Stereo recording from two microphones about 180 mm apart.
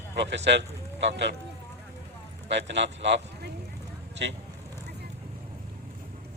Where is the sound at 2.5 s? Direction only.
80° right.